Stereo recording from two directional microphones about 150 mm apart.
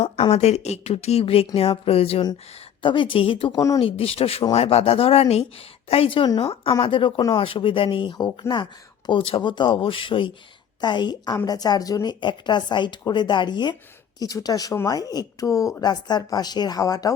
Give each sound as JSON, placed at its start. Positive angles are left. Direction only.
{"t": 0.0, "sound": "speech", "side_deg": 45}
{"t": 3.5, "sound": "speech", "side_deg": 20}
{"t": 3.8, "sound": "speech", "side_deg": 40}